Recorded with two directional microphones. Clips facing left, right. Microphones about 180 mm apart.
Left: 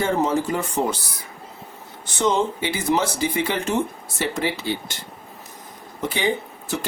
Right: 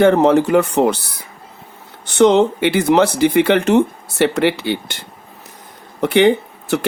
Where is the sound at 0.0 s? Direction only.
65° right (ahead or behind).